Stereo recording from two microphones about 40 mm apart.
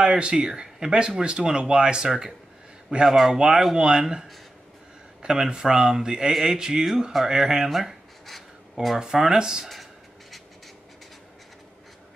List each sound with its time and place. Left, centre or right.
0.0 s speech: right
3.1 s speech: centre
3.3 s speech: centre
7.7 s a sound: centre
9.0 s speech: centre